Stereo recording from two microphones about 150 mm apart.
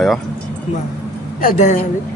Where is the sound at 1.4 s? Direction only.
65° left (ahead or behind).